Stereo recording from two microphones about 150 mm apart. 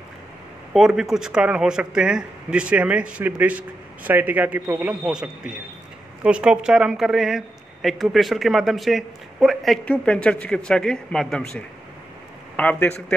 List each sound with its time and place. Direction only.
0.7 s a man's voice: centre (ahead or behind)